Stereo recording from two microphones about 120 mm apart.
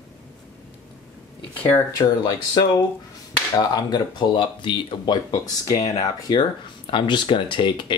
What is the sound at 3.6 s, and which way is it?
Speech, 35° left (ahead or behind).